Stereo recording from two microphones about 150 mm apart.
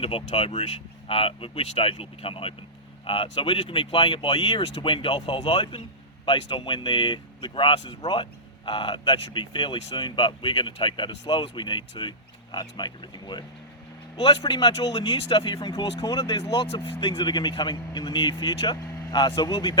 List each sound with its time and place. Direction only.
0.0 s speech: 40° left (ahead or behind)